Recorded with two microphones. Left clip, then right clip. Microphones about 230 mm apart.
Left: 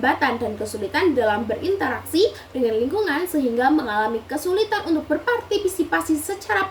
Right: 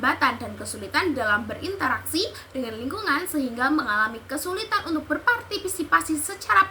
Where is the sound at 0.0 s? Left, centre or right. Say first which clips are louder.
Left 2 dB; centre.